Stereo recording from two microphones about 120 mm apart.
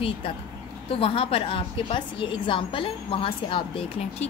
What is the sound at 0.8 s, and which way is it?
A woman's voice, 50° left (ahead or behind).